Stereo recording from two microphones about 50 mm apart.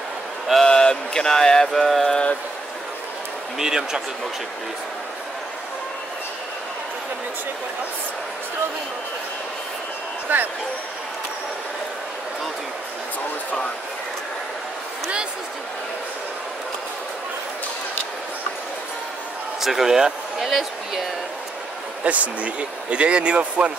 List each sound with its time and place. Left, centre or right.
0.7 s mantra: centre
3.5 s speech: centre
10.3 s speech: right
19.6 s speech: centre
22.0 s speech: right